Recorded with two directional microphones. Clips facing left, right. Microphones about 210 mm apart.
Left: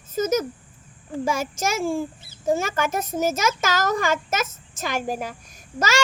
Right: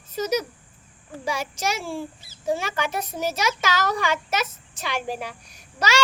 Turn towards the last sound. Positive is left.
turn(degrees=45)  # may be behind; listen again after turning